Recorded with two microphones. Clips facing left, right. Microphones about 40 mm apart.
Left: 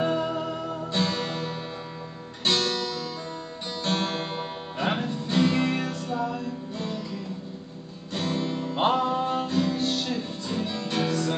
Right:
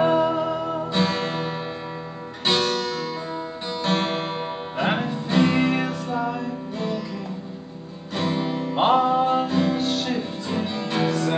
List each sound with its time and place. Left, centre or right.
0.0 s music: centre
0.9 s guitar: centre
3.8 s music: right
8.1 s music: centre